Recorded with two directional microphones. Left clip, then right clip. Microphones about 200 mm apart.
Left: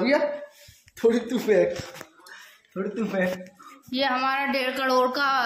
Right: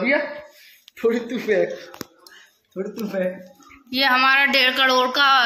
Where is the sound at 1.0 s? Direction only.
10° left (ahead or behind).